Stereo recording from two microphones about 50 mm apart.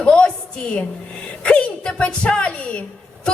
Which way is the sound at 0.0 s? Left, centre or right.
Left.